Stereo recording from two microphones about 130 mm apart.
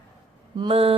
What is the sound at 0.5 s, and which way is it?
Speech, 45° right (ahead or behind).